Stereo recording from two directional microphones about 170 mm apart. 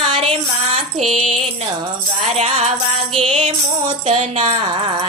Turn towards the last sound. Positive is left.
turn(degrees=-40)  # may be behind; listen again after turning